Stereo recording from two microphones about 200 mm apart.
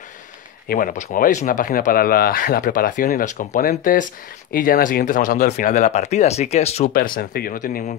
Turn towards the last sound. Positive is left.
turn(degrees=40)  # may be behind; listen again after turning